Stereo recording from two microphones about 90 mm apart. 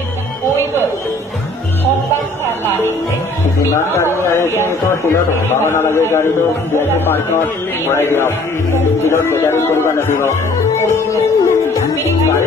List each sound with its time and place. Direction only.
3.9 s a man's voice: 30° left (ahead or behind)
10.9 s music: 30° left (ahead or behind)